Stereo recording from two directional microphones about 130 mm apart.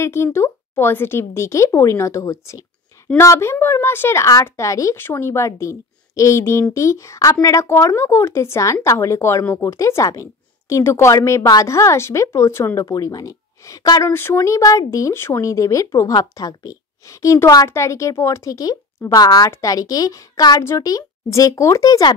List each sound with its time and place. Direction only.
0.0 s speech: 20° left (ahead or behind)